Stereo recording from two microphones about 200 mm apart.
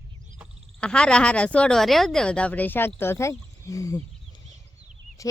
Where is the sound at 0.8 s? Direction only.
5° left (ahead or behind).